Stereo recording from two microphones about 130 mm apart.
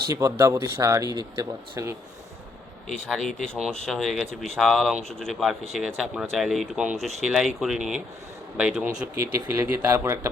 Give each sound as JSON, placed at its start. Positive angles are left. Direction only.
{"t": 0.1, "sound": "speech", "side_deg": -25}
{"t": 3.1, "sound": "speech", "side_deg": 0}
{"t": 9.1, "sound": "speech", "side_deg": -20}